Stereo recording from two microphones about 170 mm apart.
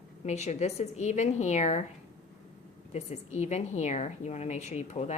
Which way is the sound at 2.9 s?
40° left (ahead or behind).